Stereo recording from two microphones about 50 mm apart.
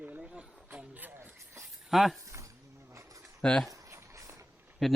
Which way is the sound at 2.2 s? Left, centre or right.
Right.